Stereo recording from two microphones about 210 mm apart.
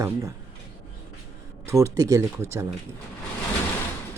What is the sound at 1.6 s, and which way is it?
Speech, 15° right (ahead or behind).